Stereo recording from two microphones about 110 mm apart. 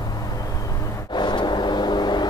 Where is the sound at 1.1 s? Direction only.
45° left (ahead or behind).